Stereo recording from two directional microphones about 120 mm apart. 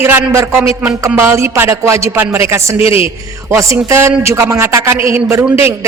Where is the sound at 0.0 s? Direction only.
15° right (ahead or behind).